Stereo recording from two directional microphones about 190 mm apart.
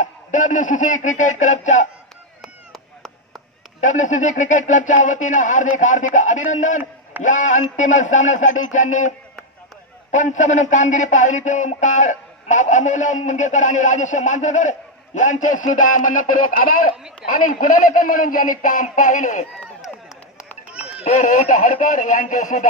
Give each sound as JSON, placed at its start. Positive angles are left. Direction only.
{"t": 0.0, "sound": "speech", "side_deg": 40}
{"t": 2.4, "sound": "chop", "side_deg": 0}
{"t": 3.8, "sound": "speech", "side_deg": 40}
{"t": 10.1, "sound": "speech", "side_deg": 40}
{"t": 20.7, "sound": "a sound", "side_deg": -5}
{"t": 21.0, "sound": "speech", "side_deg": 40}